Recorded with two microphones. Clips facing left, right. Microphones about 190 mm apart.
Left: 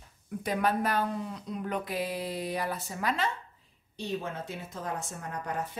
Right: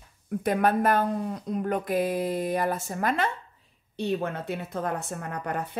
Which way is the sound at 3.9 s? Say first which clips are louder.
Right 6 dB; 60° right (ahead or behind).